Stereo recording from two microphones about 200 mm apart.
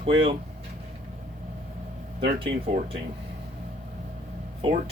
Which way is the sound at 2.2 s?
25° right (ahead or behind).